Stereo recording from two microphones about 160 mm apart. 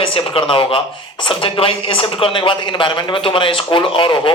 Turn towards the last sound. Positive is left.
turn(degrees=30)  # may be behind; listen again after turning